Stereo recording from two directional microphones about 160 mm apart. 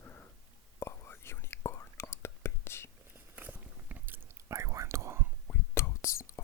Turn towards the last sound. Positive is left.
turn(degrees=15)  # may be behind; listen again after turning